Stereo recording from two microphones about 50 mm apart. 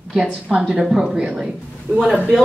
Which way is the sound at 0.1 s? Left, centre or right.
Centre.